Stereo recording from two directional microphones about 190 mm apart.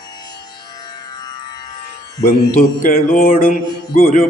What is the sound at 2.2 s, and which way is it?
Mantra, 45° left (ahead or behind).